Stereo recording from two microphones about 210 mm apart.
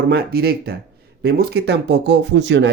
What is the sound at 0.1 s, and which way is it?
Speech, 45° right (ahead or behind).